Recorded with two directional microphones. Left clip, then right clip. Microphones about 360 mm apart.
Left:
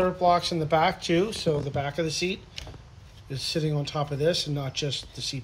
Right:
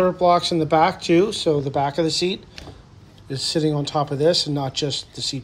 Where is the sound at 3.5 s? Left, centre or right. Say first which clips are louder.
Right 7 dB; right.